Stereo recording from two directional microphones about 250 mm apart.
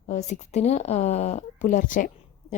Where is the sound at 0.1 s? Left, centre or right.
Left.